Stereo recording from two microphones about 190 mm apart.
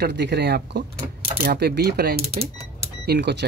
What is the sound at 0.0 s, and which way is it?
Speech, 65° right (ahead or behind).